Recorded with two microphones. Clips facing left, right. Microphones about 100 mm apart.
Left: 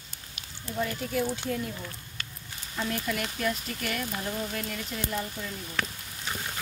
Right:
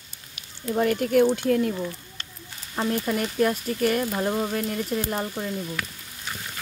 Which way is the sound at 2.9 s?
35° right (ahead or behind).